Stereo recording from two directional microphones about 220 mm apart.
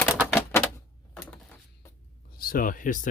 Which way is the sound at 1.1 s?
5° left (ahead or behind).